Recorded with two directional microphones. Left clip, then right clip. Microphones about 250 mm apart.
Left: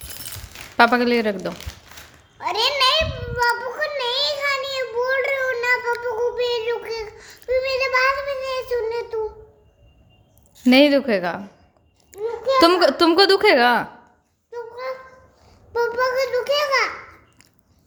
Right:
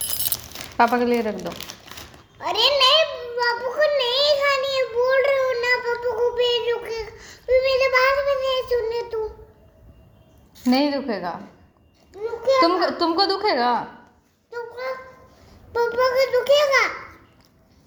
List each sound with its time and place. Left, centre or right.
0.8 s speech: left
2.4 s child singing: centre
10.7 s a woman's voice: left
12.2 s a sound: centre
12.5 s a woman's voice: left
14.5 s a sound: centre
15.7 s a child's voice: centre